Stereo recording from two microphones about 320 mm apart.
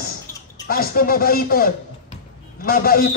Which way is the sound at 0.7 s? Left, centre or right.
Left.